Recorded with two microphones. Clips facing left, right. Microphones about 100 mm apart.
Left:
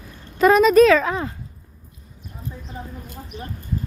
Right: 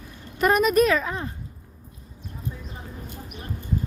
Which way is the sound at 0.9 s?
90° left.